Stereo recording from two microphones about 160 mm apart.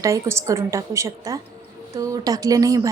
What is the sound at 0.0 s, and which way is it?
A woman's voice, 20° right (ahead or behind).